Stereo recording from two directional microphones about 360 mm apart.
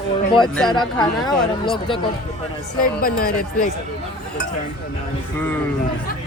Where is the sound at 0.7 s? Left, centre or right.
Centre.